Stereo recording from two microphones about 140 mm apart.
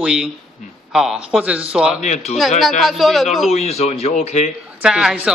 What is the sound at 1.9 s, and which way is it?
Speech, 55° left (ahead or behind).